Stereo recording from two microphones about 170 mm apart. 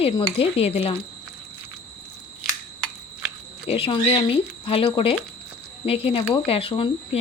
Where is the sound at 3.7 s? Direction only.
35° left (ahead or behind).